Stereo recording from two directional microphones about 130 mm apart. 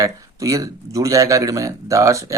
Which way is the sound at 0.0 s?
25° right (ahead or behind).